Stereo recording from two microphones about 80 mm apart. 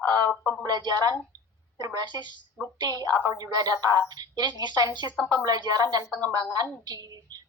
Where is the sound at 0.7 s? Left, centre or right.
Right.